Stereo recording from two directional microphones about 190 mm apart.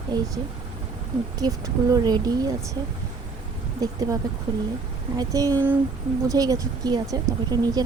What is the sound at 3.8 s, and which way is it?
Speech, 20° right (ahead or behind).